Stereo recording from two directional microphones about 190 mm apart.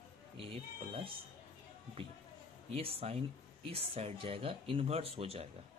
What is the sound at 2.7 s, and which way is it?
Speech, 30° right (ahead or behind).